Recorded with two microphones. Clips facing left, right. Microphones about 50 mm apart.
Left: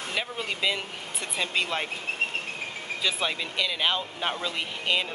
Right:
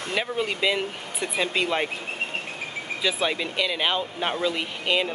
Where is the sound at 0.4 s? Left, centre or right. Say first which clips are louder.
Right 5 dB; centre.